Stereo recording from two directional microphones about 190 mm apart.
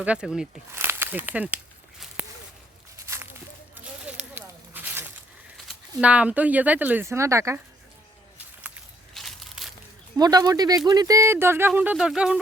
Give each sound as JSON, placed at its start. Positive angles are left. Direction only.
{"t": 0.0, "sound": "speech", "side_deg": -5}
{"t": 2.2, "sound": "a sound", "side_deg": -5}
{"t": 3.8, "sound": "a sound", "side_deg": -10}
{"t": 5.5, "sound": "speech", "side_deg": -5}
{"t": 8.6, "sound": "walk", "side_deg": -5}
{"t": 10.2, "sound": "speech", "side_deg": -20}